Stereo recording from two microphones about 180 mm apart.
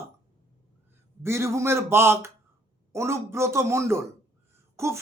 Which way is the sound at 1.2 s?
15° right (ahead or behind).